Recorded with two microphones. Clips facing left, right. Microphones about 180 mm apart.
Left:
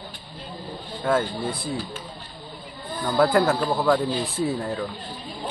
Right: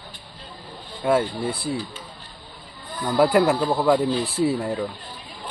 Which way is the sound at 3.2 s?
15° right (ahead or behind).